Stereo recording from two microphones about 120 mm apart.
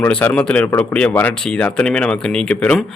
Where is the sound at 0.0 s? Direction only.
15° left (ahead or behind).